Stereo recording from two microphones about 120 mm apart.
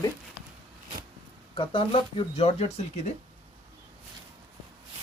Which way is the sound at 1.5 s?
45° left (ahead or behind).